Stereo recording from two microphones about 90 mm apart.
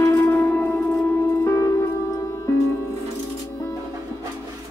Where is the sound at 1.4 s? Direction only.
40° left (ahead or behind).